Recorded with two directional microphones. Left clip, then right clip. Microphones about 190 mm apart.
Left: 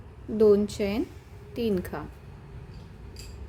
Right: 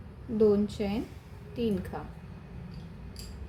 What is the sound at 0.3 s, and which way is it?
A woman's voice, 40° left (ahead or behind).